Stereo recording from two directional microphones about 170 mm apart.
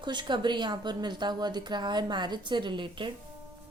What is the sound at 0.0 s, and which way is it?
A woman's voice, 25° right (ahead or behind).